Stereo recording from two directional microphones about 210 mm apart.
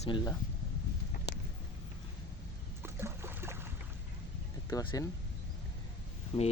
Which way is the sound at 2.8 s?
10° right (ahead or behind).